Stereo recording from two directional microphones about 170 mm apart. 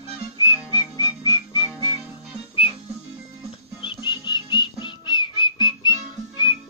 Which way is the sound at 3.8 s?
25° left (ahead or behind).